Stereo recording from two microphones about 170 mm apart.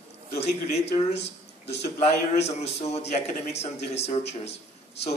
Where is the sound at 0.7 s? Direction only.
40° left (ahead or behind).